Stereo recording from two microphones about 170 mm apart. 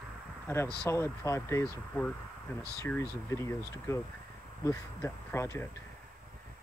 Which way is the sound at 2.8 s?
15° left (ahead or behind).